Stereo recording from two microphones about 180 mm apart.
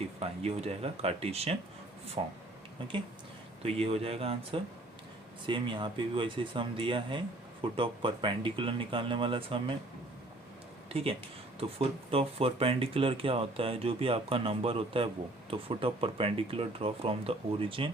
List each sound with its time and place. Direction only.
0.2 s speech: 35° right (ahead or behind)
3.6 s speech: 35° right (ahead or behind)
10.8 s speech: 30° right (ahead or behind)